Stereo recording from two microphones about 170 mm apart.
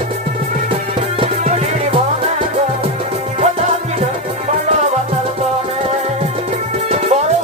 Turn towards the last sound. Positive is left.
turn(degrees=-40)  # may be behind; listen again after turning